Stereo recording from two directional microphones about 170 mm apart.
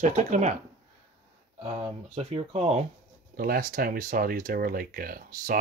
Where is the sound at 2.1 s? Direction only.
40° right (ahead or behind).